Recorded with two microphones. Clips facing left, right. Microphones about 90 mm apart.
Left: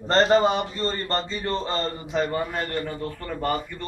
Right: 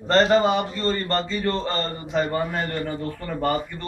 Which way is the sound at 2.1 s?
Centre (ahead or behind).